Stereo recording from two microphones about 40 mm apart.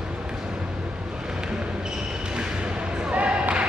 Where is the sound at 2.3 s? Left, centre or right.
Right.